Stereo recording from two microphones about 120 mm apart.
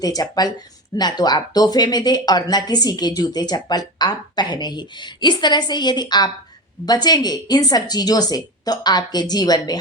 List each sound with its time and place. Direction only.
0.0 s speech: 35° left (ahead or behind)